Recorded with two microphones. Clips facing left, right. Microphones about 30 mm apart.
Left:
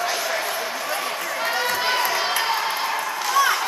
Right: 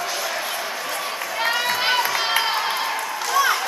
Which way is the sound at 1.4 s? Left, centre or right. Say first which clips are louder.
Right 2 dB; right.